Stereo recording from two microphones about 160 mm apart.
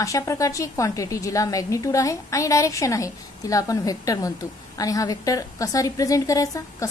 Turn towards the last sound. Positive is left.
turn(degrees=20)  # may be behind; listen again after turning